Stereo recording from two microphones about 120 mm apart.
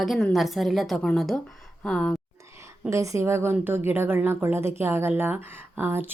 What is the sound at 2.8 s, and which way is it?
A woman's voice, 25° right (ahead or behind).